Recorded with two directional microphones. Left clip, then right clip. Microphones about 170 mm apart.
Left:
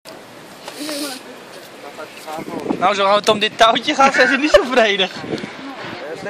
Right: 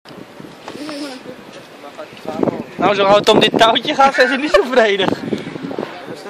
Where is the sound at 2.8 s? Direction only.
40° right (ahead or behind).